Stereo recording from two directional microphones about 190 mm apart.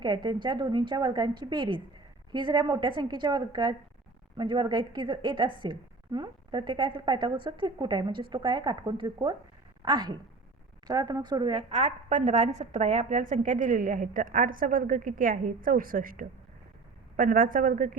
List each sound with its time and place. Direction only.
0.0 s a woman's voice: 25° right (ahead or behind)
11.7 s a woman's voice: 35° right (ahead or behind)